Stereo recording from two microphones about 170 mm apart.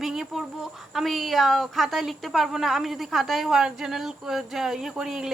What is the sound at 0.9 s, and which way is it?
A woman's voice, centre (ahead or behind).